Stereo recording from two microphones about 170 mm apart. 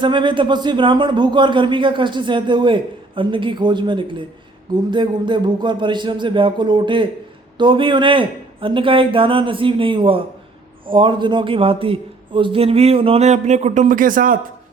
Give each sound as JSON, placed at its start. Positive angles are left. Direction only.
{"t": 0.0, "sound": "a man's voice", "side_deg": -30}